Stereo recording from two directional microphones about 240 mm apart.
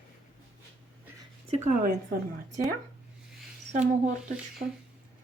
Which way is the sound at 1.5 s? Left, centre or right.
Right.